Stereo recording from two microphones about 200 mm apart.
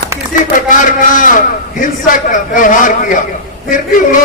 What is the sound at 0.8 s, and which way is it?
A man's voice, 40° left (ahead or behind).